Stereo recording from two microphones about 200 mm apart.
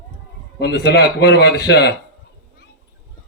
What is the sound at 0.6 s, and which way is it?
A man's voice, 55° left (ahead or behind).